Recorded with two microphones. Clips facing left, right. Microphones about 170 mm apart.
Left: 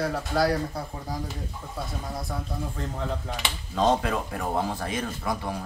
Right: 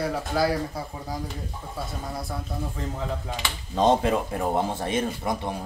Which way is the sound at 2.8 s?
Centre (ahead or behind).